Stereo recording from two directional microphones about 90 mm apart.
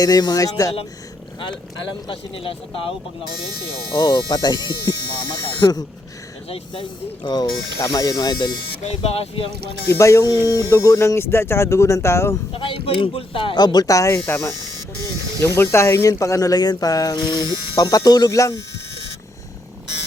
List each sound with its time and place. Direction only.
0.0 s speech: 50° left (ahead or behind)
1.4 s speech: 65° left (ahead or behind); by 2.9 s 90° left
3.9 s speech: 55° left (ahead or behind)
7.3 s speech: 55° left (ahead or behind)
7.8 s speech: 45° left (ahead or behind)
9.0 s speech: 90° left
10.0 s speech: 35° left (ahead or behind)
12.5 s speech: 75° left (ahead or behind)
13.6 s speech: 50° left (ahead or behind)
15.4 s speech: 30° left (ahead or behind)
17.2 s speech: 55° left (ahead or behind); by 18.5 s 35° left (ahead or behind)